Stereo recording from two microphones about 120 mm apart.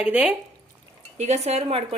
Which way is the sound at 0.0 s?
10° right (ahead or behind).